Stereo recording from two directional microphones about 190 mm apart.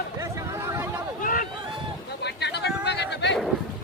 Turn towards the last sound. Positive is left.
turn(degrees=65)  # may be behind; listen again after turning